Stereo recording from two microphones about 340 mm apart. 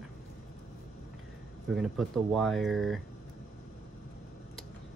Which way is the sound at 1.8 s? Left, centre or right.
Centre.